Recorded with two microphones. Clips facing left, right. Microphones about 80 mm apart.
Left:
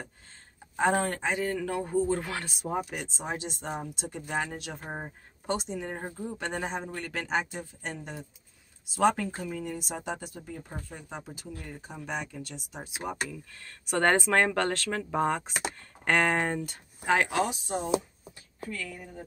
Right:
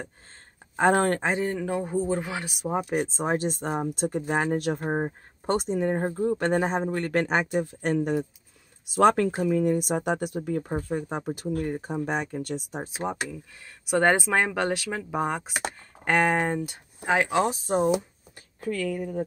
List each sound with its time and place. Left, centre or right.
0.7 s speech: right
1.3 s speech: right
2.9 s speech: right
7.0 s speech: right
7.6 s speech: right
10.7 s speech: right
13.3 s speech: centre
17.5 s speech: right
18.7 s speech: right